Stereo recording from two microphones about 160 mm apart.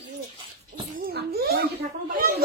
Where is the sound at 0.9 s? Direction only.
75° right (ahead or behind).